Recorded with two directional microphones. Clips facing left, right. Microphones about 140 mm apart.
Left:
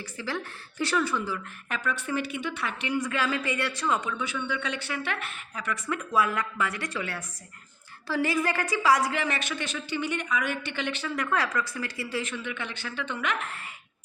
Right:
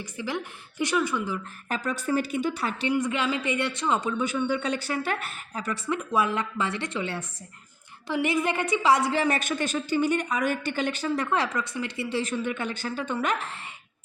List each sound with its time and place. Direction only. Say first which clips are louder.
0.0 s a woman's voice: right 2 dB; 20° right (ahead or behind)
1.7 s a woman's voice: right 4 dB; 40° right (ahead or behind)
2.9 s a woman's voice: right 1 dB; 20° right (ahead or behind)
4.2 s a woman's voice: right 5 dB; 45° right (ahead or behind); by 12.2 s 25° right (ahead or behind)
12.2 s a woman's voice: right 6 dB; 40° right (ahead or behind)